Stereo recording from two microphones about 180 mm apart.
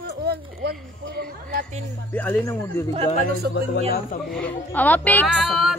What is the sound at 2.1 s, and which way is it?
Speech, 10° left (ahead or behind).